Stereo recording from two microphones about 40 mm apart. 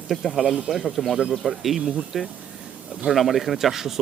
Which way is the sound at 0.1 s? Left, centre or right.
Centre.